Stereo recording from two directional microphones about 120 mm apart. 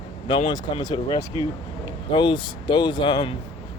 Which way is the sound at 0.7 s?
40° left (ahead or behind).